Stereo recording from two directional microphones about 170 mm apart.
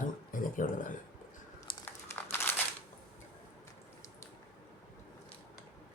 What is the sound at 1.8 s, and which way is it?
Crumpling, 10° left (ahead or behind).